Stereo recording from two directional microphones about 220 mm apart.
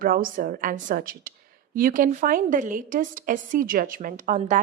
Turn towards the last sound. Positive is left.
turn(degrees=-35)  # may be behind; listen again after turning